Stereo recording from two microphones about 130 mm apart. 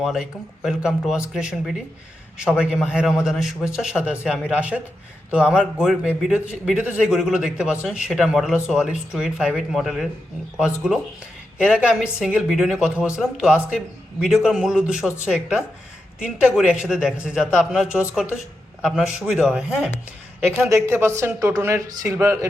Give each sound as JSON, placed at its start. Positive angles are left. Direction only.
{"t": 0.0, "sound": "a man's voice", "side_deg": -5}
{"t": 11.5, "sound": "a man's voice", "side_deg": -5}
{"t": 20.7, "sound": "speech", "side_deg": -20}